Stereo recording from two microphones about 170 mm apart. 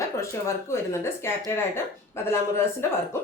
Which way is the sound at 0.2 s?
15° left (ahead or behind).